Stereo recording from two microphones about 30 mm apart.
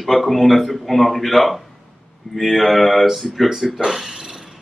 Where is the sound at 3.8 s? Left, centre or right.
Centre.